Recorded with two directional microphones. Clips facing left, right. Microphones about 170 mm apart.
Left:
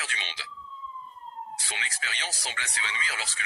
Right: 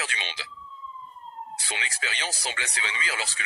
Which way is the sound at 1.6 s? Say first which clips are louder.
Right 3 dB; 90° right.